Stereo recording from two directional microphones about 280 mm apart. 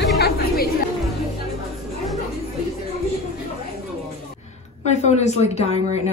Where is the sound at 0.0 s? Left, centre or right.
Left.